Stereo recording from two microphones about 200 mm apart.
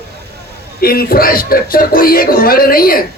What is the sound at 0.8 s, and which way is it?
Speech, 50° left (ahead or behind).